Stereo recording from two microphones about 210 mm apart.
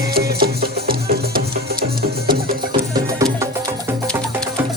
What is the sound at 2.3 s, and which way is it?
Music, 20° right (ahead or behind).